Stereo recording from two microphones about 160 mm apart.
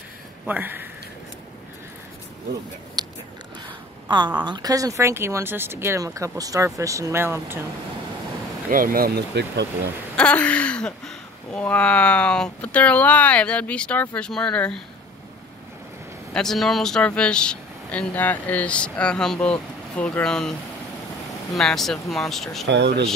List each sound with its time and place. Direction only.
0.5 s speech: 10° right (ahead or behind)
3.0 s biting: 25° right (ahead or behind)
4.5 s speech: 25° right (ahead or behind)
8.6 s speech: 60° right (ahead or behind); by 9.8 s 90° right
10.1 s speech: 10° left (ahead or behind)
16.3 s speech: centre (ahead or behind)
21.5 s speech: centre (ahead or behind)
22.7 s speech: 90° right